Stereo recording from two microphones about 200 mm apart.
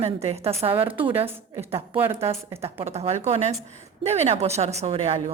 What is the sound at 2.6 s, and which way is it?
A woman's voice, 30° right (ahead or behind).